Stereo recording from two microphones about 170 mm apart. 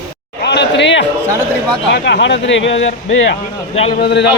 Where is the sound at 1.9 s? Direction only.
90° left.